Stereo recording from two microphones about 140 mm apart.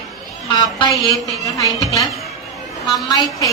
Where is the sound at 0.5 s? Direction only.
30° left (ahead or behind).